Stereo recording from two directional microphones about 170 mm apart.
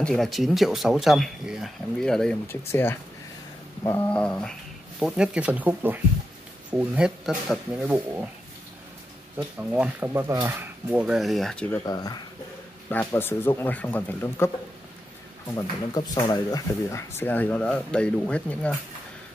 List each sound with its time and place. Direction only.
0.0 s speech: centre (ahead or behind)
9.6 s speech: 10° right (ahead or behind)
10.9 s speech: 5° right (ahead or behind)
11.8 s speech: 20° left (ahead or behind)
15.9 s speech: 25° left (ahead or behind); by 18.8 s 10° left (ahead or behind)